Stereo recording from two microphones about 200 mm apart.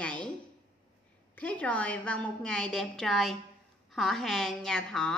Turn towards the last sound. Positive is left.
turn(degrees=5)  # may be behind; listen again after turning